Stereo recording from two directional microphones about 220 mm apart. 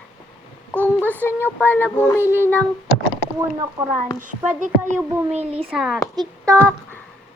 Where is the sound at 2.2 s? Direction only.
10° right (ahead or behind).